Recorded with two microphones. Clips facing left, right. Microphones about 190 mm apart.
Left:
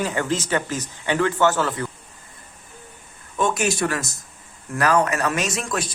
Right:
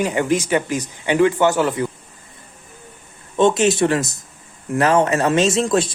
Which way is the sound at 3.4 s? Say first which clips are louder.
Right 7 dB; 25° right (ahead or behind).